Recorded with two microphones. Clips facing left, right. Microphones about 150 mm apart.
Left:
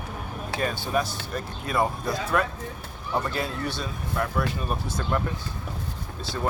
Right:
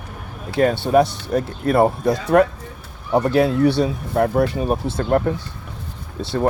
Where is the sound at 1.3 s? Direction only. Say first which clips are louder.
Right 10 dB; 60° right (ahead or behind).